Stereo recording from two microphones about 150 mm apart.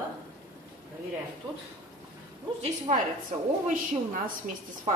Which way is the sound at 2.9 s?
55° right (ahead or behind).